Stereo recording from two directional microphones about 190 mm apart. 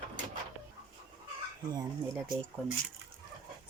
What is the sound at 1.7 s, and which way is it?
Speech, 15° right (ahead or behind).